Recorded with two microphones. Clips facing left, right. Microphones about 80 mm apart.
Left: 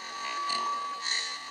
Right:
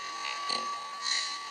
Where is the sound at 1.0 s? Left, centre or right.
Left.